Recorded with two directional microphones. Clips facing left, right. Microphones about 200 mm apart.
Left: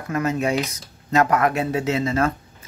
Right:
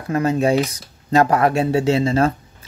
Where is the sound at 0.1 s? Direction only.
30° right (ahead or behind).